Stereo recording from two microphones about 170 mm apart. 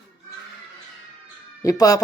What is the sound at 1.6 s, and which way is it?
Speech, 20° left (ahead or behind).